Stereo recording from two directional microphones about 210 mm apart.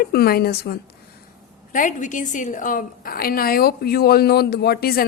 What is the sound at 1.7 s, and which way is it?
A woman's voice, 35° left (ahead or behind).